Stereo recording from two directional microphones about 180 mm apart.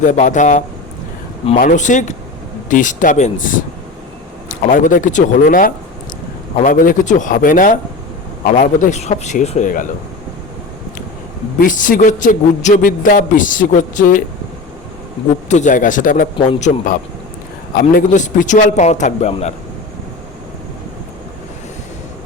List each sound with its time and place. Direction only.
0.0 s a man's voice: 45° left (ahead or behind)
4.7 s a man's voice: 45° left (ahead or behind)
11.6 s a man's voice: 45° left (ahead or behind)
15.4 s a man's voice: 40° left (ahead or behind)